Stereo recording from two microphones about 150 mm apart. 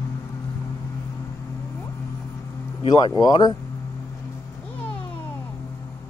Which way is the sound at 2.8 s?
30° left (ahead or behind).